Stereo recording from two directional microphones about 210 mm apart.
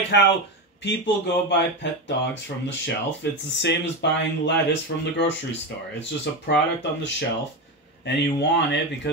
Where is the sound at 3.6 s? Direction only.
55° left (ahead or behind).